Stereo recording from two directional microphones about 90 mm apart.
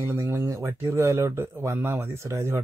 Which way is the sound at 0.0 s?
30° right (ahead or behind).